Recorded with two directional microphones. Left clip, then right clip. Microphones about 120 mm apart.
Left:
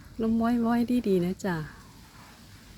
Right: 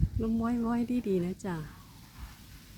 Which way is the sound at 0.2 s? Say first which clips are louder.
Left 6 dB; 35° left (ahead or behind).